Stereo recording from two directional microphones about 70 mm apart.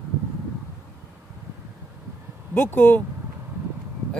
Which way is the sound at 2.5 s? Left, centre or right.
Left.